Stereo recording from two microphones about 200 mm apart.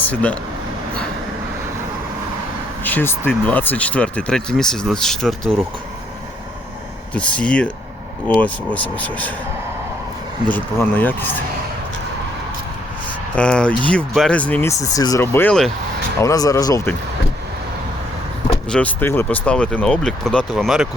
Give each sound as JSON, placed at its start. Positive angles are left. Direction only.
{"t": 0.1, "sound": "speech", "side_deg": 5}
{"t": 2.8, "sound": "speech", "side_deg": 10}
{"t": 7.1, "sound": "speech", "side_deg": 5}
{"t": 10.5, "sound": "speech", "side_deg": 10}
{"t": 13.3, "sound": "speech", "side_deg": 5}
{"t": 16.2, "sound": "speech", "side_deg": 15}
{"t": 18.7, "sound": "speech", "side_deg": 5}